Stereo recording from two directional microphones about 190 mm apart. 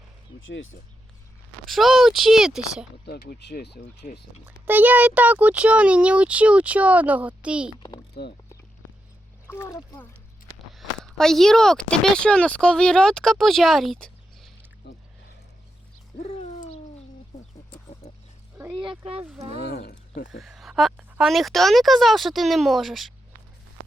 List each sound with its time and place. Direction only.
0.4 s speech: 90° left
1.6 s a woman's voice: centre (ahead or behind)
3.1 s speech: 55° left (ahead or behind)
4.4 s speech: 10° right (ahead or behind)
8.1 s speech: 60° left (ahead or behind)
9.6 s speech: 20° left (ahead or behind)
10.8 s speech: centre (ahead or behind)
14.8 s a sound: 60° left (ahead or behind)
16.1 s a sound: 45° left (ahead or behind)
18.5 s a sound: 5° right (ahead or behind)
18.8 s speech: 30° right (ahead or behind)
19.5 s speech: 55° left (ahead or behind)
20.4 s a woman's voice: centre (ahead or behind)